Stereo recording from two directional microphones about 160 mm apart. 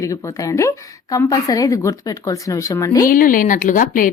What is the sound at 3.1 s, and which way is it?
A woman's voice, 60° left (ahead or behind).